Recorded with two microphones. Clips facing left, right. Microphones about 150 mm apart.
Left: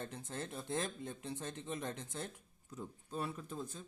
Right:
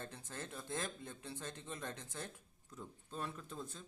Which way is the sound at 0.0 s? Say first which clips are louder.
Left 4 dB; 20° left (ahead or behind).